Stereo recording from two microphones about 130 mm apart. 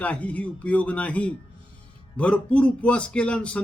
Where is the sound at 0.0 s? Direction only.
10° left (ahead or behind).